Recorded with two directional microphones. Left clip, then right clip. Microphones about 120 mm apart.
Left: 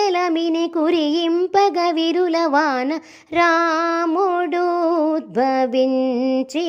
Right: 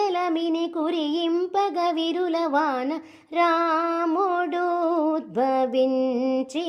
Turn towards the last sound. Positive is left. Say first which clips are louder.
# left 4 dB
turn(degrees=20)  # may be behind; listen again after turning